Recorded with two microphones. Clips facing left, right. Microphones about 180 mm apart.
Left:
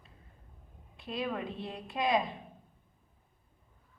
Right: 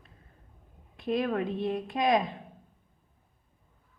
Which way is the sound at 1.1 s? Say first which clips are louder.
Right 7 dB; 55° right (ahead or behind).